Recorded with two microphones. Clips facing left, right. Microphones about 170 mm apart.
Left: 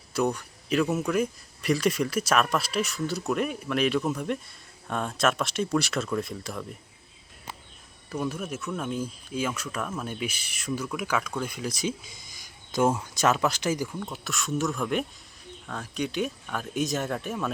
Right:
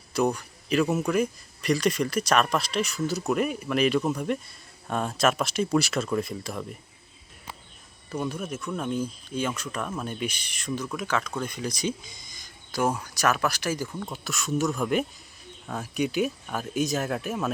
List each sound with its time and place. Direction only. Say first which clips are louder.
0.1 s speech: right 1 dB; centre (ahead or behind)
8.1 s speech: even; 5° left (ahead or behind)
12.7 s speech: left 2 dB; 25° left (ahead or behind)
14.1 s speech: right 1 dB; centre (ahead or behind)